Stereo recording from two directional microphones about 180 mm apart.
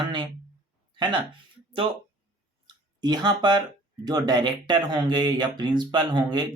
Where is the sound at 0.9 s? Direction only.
25° right (ahead or behind).